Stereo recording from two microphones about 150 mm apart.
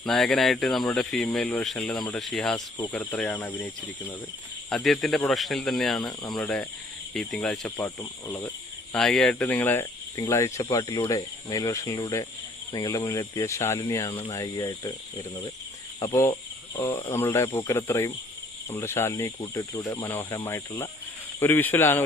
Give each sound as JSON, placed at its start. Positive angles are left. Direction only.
{"t": 0.0, "sound": "speech", "side_deg": 0}
{"t": 4.7, "sound": "speech", "side_deg": 0}
{"t": 7.8, "sound": "speech", "side_deg": 20}
{"t": 14.1, "sound": "speech", "side_deg": 35}
{"t": 16.7, "sound": "speech", "side_deg": 20}